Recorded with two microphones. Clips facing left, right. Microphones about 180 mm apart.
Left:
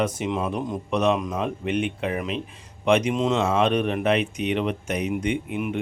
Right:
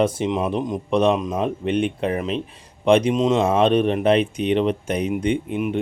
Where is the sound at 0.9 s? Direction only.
30° right (ahead or behind).